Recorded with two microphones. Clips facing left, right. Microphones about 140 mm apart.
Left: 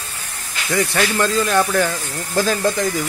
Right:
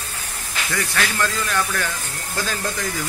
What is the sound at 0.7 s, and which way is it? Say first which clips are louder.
Speech: left 6 dB; 25° left (ahead or behind).